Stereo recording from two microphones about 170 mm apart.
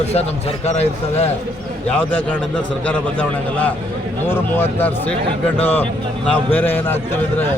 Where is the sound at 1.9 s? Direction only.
10° left (ahead or behind).